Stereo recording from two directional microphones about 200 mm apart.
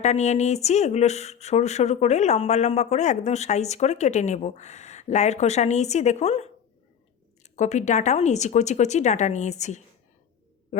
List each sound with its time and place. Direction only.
0.0 s speech: 35° left (ahead or behind)